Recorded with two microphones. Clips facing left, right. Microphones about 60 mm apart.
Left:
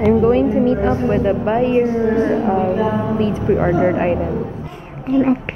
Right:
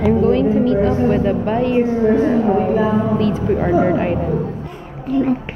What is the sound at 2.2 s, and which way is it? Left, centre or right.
Speech, centre.